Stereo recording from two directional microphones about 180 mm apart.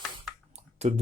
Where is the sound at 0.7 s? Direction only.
35° right (ahead or behind).